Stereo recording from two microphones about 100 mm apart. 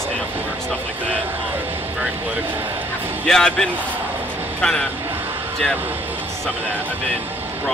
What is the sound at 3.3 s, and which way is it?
Speech, 5° left (ahead or behind).